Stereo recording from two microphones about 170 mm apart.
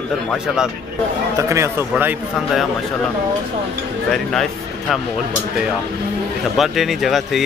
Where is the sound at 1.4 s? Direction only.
15° right (ahead or behind).